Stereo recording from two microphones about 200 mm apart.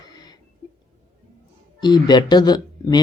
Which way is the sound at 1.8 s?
20° left (ahead or behind).